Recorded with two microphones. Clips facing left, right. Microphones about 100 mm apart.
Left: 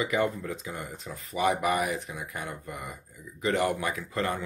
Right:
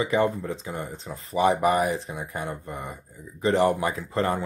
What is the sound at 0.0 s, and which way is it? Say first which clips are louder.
Speech: right 4 dB; 30° right (ahead or behind).